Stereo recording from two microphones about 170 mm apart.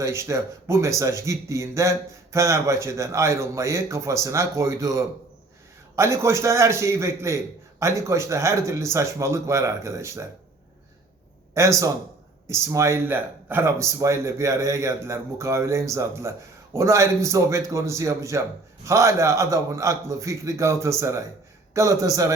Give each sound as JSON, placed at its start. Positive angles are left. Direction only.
{"t": 0.0, "sound": "speech", "side_deg": -15}
{"t": 11.5, "sound": "a man's voice", "side_deg": -15}